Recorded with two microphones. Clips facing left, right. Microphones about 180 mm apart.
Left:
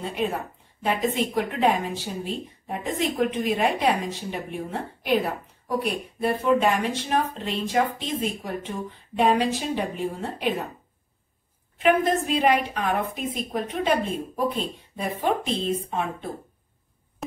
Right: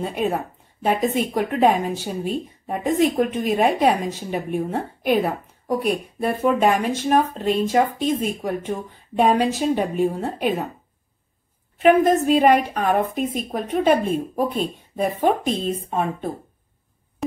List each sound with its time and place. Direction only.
0.0 s speech: 50° right (ahead or behind)
11.8 s speech: 45° right (ahead or behind)